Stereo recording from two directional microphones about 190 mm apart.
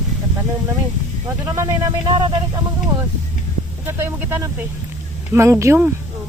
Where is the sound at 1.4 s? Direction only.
15° right (ahead or behind).